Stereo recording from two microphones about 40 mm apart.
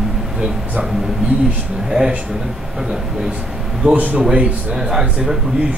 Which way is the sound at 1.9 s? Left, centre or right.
Centre.